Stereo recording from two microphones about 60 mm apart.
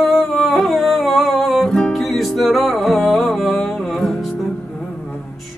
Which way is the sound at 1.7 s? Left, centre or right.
Centre.